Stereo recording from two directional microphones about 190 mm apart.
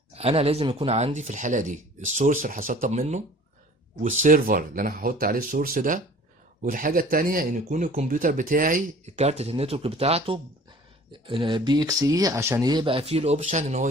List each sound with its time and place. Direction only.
0.1 s speech: 30° right (ahead or behind)